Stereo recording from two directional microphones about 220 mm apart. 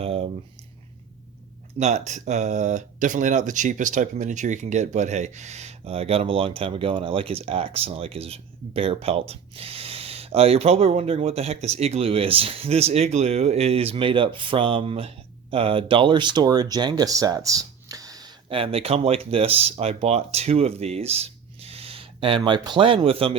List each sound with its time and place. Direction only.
0.0 s speech: 25° right (ahead or behind)
1.8 s speech: 30° right (ahead or behind)